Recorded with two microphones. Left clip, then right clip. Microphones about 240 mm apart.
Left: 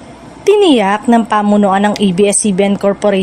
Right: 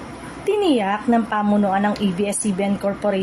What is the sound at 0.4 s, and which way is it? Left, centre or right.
A woman's voice, left.